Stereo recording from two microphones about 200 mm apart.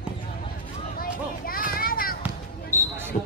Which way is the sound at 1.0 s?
45° left (ahead or behind).